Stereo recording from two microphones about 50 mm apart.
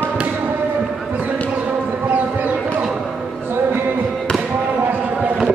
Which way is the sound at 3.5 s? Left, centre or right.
Right.